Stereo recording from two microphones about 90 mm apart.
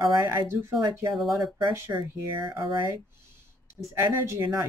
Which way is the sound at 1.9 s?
35° right (ahead or behind).